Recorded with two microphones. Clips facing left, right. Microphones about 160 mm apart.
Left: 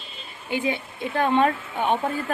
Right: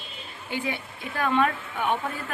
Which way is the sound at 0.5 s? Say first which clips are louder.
Left 5 dB; 20° left (ahead or behind).